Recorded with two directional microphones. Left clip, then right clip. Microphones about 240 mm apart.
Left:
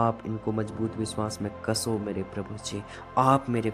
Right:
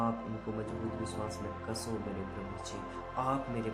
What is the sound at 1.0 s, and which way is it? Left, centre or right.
Speech, left.